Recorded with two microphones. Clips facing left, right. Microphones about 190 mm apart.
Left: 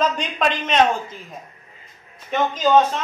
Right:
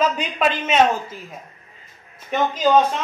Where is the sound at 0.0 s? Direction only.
10° right (ahead or behind).